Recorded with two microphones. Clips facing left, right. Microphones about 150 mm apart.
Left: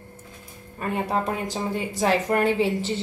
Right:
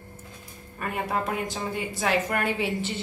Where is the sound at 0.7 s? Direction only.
30° left (ahead or behind).